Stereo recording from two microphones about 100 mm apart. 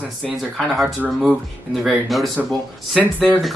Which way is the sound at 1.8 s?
Centre (ahead or behind).